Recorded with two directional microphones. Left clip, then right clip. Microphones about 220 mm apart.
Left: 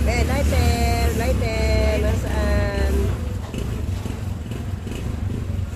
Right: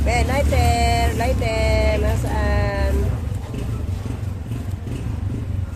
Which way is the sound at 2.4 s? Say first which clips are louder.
Even; 25° right (ahead or behind).